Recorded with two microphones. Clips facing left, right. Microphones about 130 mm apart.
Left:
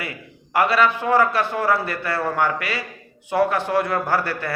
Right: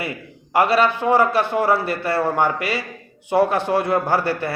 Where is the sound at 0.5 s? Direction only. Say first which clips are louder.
Right 2 dB; 30° right (ahead or behind).